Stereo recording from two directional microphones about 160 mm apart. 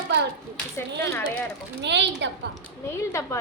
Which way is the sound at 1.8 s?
90° right.